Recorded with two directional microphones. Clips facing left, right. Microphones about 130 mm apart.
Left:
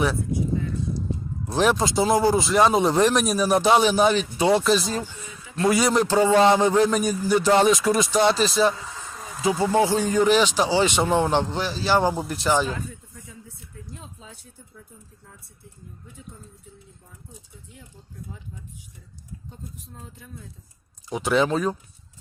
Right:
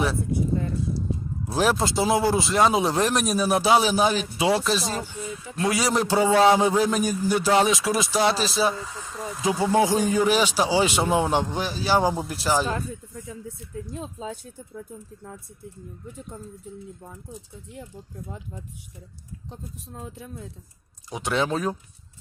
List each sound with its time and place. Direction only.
1.5 s a man's voice: 5° right (ahead or behind)
14.0 s speech: 90° right
21.1 s a man's voice: centre (ahead or behind)